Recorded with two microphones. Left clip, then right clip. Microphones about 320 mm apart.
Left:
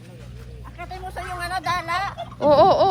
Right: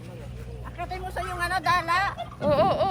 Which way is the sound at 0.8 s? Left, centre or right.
Centre.